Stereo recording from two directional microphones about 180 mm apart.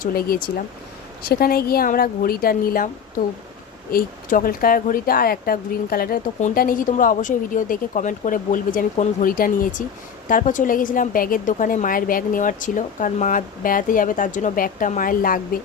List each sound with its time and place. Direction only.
0.0 s speech: 55° left (ahead or behind)
3.9 s speech: 50° left (ahead or behind)